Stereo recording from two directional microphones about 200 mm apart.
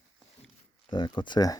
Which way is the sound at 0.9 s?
20° left (ahead or behind).